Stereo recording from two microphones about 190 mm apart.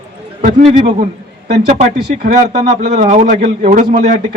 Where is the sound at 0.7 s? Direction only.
40° right (ahead or behind).